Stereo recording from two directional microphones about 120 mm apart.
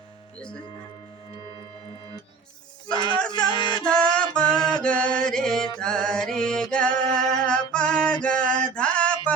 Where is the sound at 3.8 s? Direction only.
5° left (ahead or behind).